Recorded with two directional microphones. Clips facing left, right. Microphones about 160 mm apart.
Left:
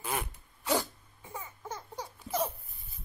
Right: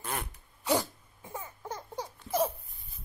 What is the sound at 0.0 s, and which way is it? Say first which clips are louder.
Zipper: left 2 dB; 5° left (ahead or behind).